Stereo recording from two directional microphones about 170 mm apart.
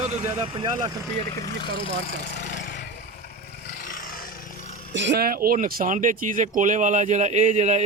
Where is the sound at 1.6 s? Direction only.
30° left (ahead or behind).